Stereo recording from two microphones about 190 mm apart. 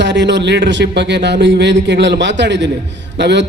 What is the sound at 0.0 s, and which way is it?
A man's voice, 70° right (ahead or behind).